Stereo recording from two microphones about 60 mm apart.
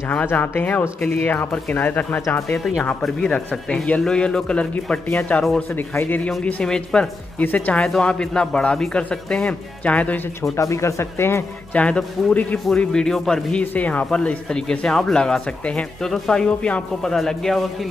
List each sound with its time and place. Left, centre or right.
0.1 s a man's voice: left
2.4 s a man's voice: centre
5.0 s a man's voice: left
5.4 s a man's voice: centre
5.8 s a man's voice: left
6.4 s speech: centre
7.3 s a man's voice: left
10.5 s speech: left
11.7 s a man's voice: centre
17.0 s a man's voice: centre